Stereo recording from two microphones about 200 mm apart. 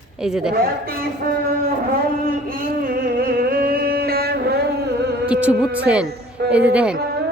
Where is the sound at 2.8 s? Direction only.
45° right (ahead or behind).